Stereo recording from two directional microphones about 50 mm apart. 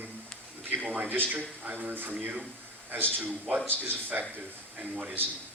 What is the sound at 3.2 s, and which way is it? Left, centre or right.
Speech, right.